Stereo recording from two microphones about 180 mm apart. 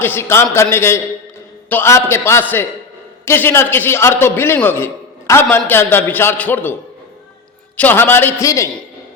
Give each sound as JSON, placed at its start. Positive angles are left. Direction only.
{"t": 0.0, "sound": "a man's voice", "side_deg": 15}
{"t": 7.8, "sound": "a man's voice", "side_deg": 10}